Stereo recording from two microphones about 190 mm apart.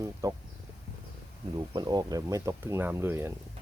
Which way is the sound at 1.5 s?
20° right (ahead or behind).